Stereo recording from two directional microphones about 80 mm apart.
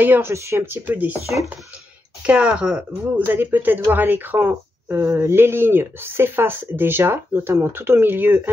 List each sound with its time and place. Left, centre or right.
0.0 s speech: right
0.3 s speech: right
2.2 s speech: centre
3.2 s speech: right